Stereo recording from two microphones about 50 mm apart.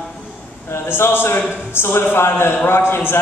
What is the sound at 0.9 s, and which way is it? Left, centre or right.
Speech, left.